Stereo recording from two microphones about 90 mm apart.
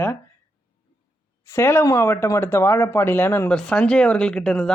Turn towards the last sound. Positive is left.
turn(degrees=5)  # may be behind; listen again after turning